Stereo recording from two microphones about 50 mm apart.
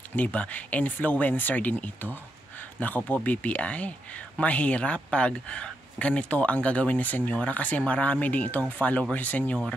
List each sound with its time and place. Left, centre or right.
0.1 s speech: left